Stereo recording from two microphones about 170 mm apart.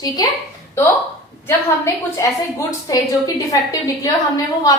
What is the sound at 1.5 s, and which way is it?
A woman's voice, 15° left (ahead or behind).